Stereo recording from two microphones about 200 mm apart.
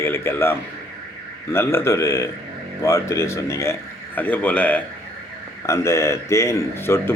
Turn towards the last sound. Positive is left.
turn(degrees=10)  # may be behind; listen again after turning